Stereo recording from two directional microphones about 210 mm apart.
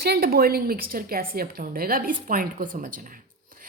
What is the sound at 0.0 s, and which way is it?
A woman's voice, 50° right (ahead or behind).